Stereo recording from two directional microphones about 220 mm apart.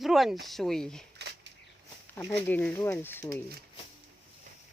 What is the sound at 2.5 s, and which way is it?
Speech, 5° left (ahead or behind).